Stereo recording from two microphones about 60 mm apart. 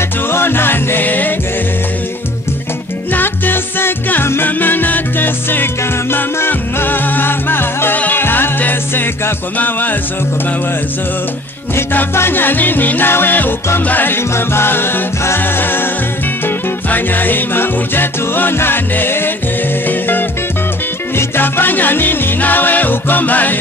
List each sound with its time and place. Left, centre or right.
0.3 s music: left
3.1 s music: left
11.7 s music: left